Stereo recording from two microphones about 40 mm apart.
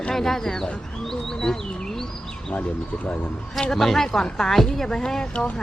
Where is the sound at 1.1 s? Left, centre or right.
Centre.